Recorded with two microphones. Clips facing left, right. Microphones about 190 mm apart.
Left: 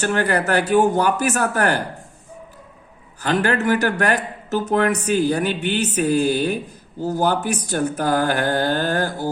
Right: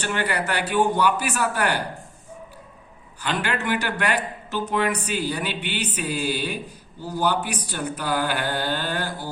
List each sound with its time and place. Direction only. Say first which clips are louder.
0.0 s speech: left 6 dB; 45° left (ahead or behind)
3.2 s speech: left 7 dB; 45° left (ahead or behind)